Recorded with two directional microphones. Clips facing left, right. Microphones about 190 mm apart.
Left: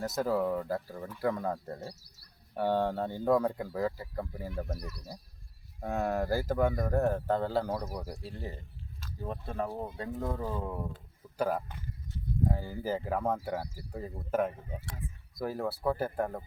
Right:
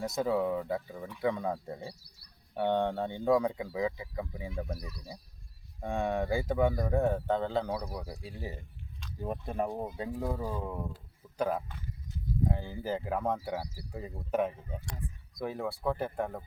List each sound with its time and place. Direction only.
0.0 s speech: centre (ahead or behind)
4.8 s speech: 45° left (ahead or behind)
5.8 s speech: 5° left (ahead or behind)